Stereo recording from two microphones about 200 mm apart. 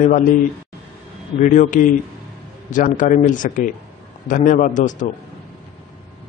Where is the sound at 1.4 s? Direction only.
40° left (ahead or behind).